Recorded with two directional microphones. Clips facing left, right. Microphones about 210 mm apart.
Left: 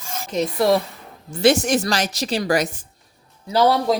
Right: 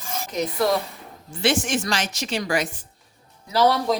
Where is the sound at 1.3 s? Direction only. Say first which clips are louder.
Left 6 dB; 40° left (ahead or behind).